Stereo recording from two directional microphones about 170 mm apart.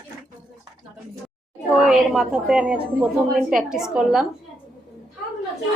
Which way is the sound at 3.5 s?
5° right (ahead or behind).